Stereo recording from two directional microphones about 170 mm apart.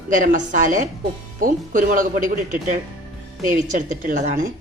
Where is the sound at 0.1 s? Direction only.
50° right (ahead or behind).